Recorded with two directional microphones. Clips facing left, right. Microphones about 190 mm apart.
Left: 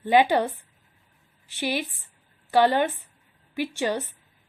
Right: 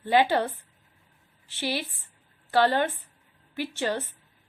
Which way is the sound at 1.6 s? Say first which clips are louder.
Left 3 dB; 15° left (ahead or behind).